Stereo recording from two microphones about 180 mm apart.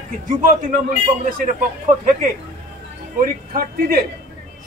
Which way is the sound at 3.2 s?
55° right (ahead or behind).